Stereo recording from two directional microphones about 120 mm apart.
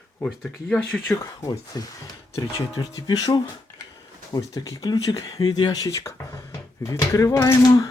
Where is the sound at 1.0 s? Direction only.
25° left (ahead or behind).